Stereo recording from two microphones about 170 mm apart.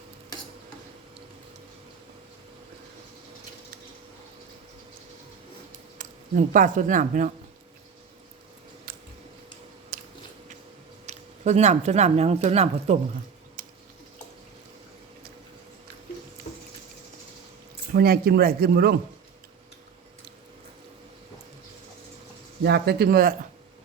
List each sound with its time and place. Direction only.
6.0 s speech: 50° right (ahead or behind)
8.9 s a sound: 65° right (ahead or behind)
9.9 s biting: 55° right (ahead or behind)
11.0 s speech: 40° right (ahead or behind)
13.6 s a sound: 55° right (ahead or behind)
17.9 s speech: 65° right (ahead or behind)
22.6 s speech: 75° right (ahead or behind); by 23.3 s 60° right (ahead or behind)